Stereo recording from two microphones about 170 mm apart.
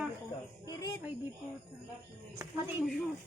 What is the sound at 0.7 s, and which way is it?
Speech, 20° left (ahead or behind).